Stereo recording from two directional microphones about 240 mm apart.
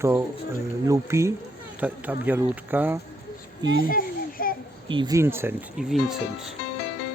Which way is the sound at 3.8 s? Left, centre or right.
Left.